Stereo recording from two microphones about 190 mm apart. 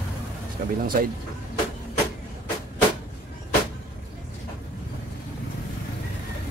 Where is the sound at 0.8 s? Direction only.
50° right (ahead or behind).